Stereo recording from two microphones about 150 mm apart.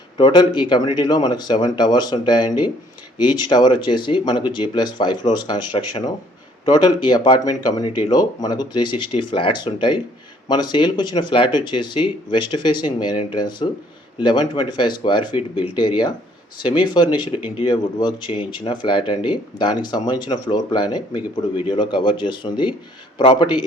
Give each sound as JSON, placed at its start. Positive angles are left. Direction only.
{"t": 0.2, "sound": "speech", "side_deg": 30}